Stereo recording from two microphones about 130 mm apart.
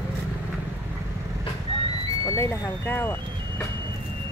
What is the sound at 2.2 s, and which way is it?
Speech, 20° left (ahead or behind).